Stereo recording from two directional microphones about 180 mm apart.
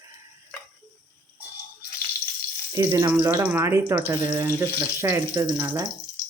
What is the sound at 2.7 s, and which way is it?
Speech, 20° right (ahead or behind).